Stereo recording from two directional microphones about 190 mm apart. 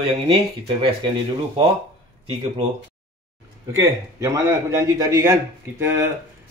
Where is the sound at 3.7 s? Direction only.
15° right (ahead or behind).